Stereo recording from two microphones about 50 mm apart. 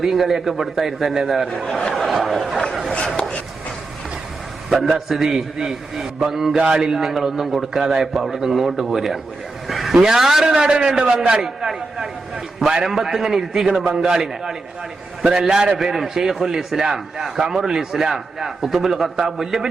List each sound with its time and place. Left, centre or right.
0.0 s a man's voice: centre
1.5 s speech: centre
3.2 s a sound: centre
4.7 s a man's voice: centre
9.6 s vehicle: centre
10.0 s a man's voice: centre
15.8 s a man's voice: centre